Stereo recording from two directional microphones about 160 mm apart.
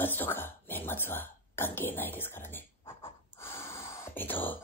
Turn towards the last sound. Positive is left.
turn(degrees=10)  # may be behind; listen again after turning